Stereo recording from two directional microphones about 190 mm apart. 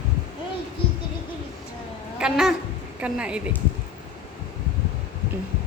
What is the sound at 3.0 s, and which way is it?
Speech, 5° right (ahead or behind).